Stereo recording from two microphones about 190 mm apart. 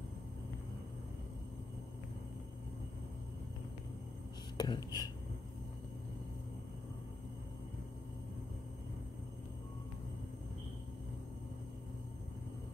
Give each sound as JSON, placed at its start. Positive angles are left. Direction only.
{"t": 4.6, "sound": "speech", "side_deg": 20}